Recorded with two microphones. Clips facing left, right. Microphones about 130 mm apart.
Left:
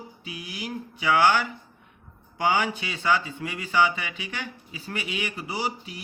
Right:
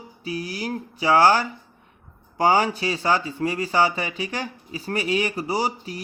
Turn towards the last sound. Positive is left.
turn(degrees=-40)  # may be behind; listen again after turning